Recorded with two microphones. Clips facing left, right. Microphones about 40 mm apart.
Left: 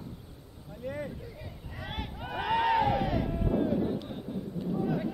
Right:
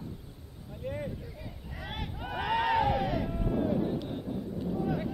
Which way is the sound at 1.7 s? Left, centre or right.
Centre.